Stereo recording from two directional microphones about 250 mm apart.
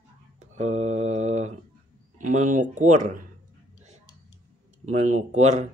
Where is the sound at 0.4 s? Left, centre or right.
Right.